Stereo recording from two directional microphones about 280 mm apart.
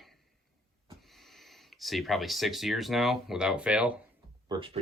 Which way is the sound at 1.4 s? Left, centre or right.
Centre.